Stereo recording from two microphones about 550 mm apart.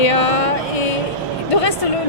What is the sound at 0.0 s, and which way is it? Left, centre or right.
Music, left.